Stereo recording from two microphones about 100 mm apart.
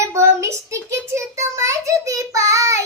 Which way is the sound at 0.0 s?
30° right (ahead or behind).